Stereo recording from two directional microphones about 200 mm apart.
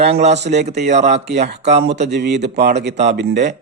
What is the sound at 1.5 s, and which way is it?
Speech, 60° right (ahead or behind).